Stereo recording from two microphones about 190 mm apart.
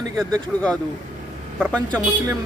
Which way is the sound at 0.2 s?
5° left (ahead or behind).